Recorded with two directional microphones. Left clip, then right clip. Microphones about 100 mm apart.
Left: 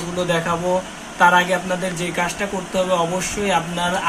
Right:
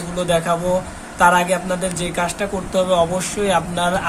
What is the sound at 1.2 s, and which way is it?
Speech, 30° right (ahead or behind).